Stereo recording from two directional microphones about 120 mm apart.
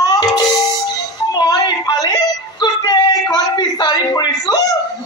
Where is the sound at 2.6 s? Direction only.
35° left (ahead or behind).